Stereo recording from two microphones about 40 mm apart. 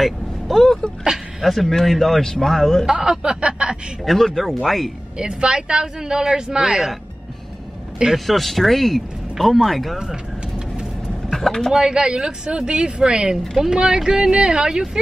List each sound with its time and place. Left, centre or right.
0.0 s speech: centre
1.1 s a sound: centre
1.7 s speech: centre
2.9 s a woman's voice: centre
4.0 s speech: centre
5.2 s speech: right
8.3 s speech: centre
11.2 s a sound: centre
11.7 s a woman's voice: centre